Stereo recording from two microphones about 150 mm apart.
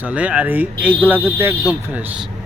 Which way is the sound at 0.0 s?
10° right (ahead or behind).